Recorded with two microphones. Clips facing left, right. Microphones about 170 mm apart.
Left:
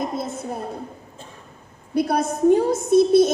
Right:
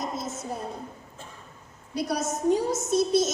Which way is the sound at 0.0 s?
60° left (ahead or behind).